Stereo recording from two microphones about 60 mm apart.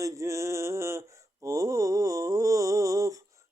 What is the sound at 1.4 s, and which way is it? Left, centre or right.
Mantra, right.